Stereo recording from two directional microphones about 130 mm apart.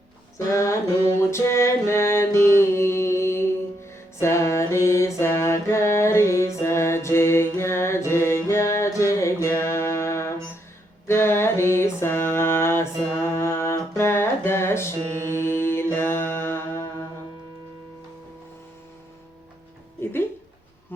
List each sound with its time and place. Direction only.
0.3 s music: 25° left (ahead or behind)
11.0 s a sound: 20° left (ahead or behind)
13.4 s music: 20° left (ahead or behind)